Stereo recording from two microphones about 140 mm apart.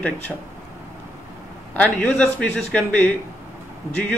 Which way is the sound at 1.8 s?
10° left (ahead or behind).